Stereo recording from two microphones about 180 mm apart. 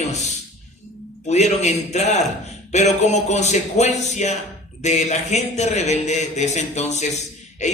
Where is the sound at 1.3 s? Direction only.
40° left (ahead or behind).